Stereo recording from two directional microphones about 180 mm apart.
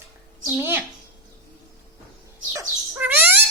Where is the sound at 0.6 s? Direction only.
10° right (ahead or behind).